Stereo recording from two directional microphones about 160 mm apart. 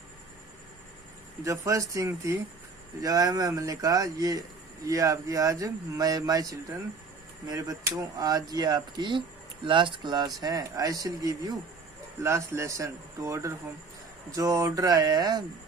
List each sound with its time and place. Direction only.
1.5 s speech: 20° right (ahead or behind)